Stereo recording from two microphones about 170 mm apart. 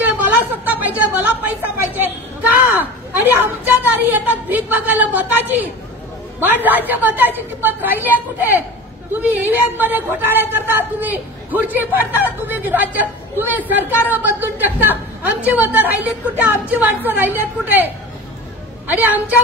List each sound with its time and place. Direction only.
0.0 s a sound: 10° right (ahead or behind)
2.7 s a woman's voice: 10° right (ahead or behind)
18.9 s a woman's voice: 10° right (ahead or behind)